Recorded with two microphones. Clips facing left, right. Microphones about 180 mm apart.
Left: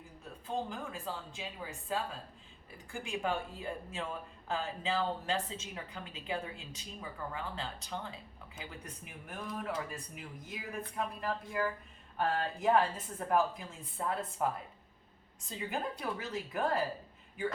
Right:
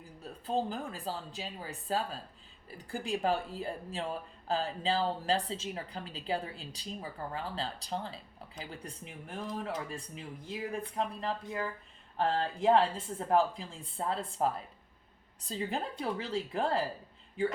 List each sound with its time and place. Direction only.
0.0 s a woman's voice: 35° right (ahead or behind)